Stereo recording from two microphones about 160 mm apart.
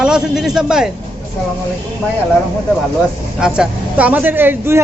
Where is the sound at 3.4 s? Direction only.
5° right (ahead or behind).